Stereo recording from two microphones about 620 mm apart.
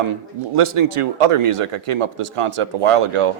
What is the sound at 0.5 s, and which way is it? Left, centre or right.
A man's voice, right.